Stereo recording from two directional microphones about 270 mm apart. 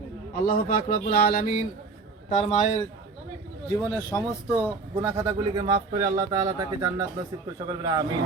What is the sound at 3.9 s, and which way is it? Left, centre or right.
Speech, centre.